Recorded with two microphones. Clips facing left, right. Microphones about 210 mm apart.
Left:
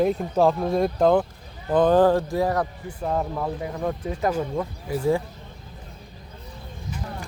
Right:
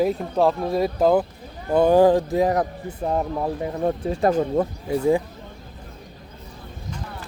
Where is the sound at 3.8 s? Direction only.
30° right (ahead or behind).